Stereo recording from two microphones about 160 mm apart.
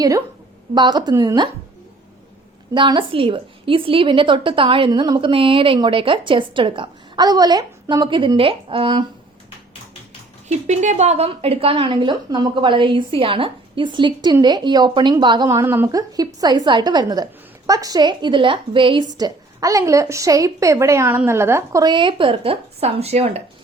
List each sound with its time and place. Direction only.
0.7 s a woman's voice: 25° right (ahead or behind)
2.7 s a woman's voice: 30° right (ahead or behind)
10.5 s a woman's voice: 45° right (ahead or behind); by 15.4 s 30° right (ahead or behind)
15.4 s a woman's voice: 15° right (ahead or behind); by 23.4 s 40° right (ahead or behind)